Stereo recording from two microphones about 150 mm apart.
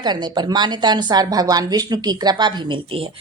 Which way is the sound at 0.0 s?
30° right (ahead or behind).